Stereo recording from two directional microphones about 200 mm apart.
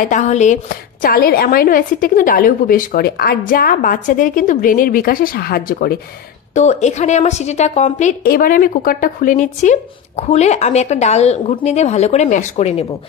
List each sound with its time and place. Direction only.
0.0 s a woman's voice: 35° left (ahead or behind)
6.5 s a woman's voice: 35° left (ahead or behind)